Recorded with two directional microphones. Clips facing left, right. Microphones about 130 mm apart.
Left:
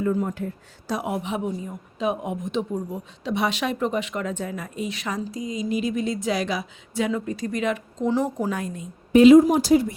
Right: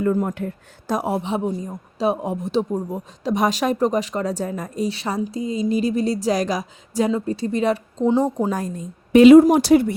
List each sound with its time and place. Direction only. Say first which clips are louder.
0.0 s speech: right 3 dB; 50° right (ahead or behind)
1.0 s speech: right 3 dB; 30° right (ahead or behind)
7.1 s speech: right 4 dB; 30° right (ahead or behind)
8.4 s speech: right 3 dB; 35° right (ahead or behind)
9.1 s speech: right 3 dB; 70° right (ahead or behind)